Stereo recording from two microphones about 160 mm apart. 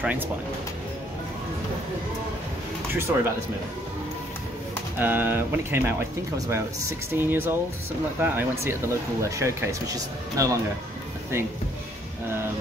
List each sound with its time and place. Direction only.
0.0 s speech: 10° right (ahead or behind)
2.9 s speech: 15° right (ahead or behind)
4.9 s speech: 10° right (ahead or behind)